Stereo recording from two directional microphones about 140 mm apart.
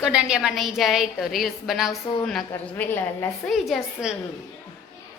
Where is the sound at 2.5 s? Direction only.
15° left (ahead or behind).